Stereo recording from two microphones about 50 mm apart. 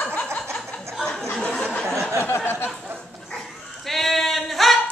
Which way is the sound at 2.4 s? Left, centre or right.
Left.